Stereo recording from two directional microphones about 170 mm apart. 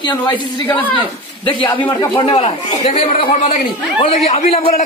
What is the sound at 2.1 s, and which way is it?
A man's voice, 30° left (ahead or behind).